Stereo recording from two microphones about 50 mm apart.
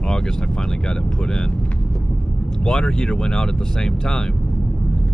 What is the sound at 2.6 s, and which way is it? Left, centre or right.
Speech, centre.